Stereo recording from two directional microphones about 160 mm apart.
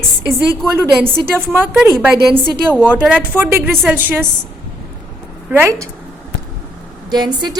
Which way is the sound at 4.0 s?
15° right (ahead or behind).